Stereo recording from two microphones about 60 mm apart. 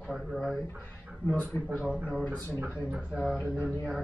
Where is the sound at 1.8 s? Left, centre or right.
Centre.